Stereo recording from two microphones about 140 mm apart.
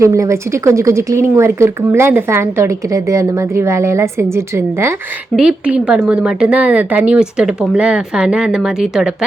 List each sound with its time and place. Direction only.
0.0 s speech: 20° right (ahead or behind)
5.4 s speech: 5° right (ahead or behind)